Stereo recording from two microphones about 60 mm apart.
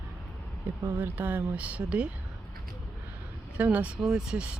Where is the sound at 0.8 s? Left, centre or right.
Right.